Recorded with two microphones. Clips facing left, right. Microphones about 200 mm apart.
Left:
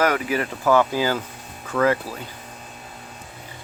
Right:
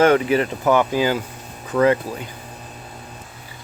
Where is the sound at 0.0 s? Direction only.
25° right (ahead or behind).